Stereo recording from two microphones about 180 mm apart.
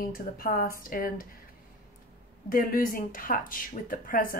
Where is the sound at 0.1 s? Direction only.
55° left (ahead or behind).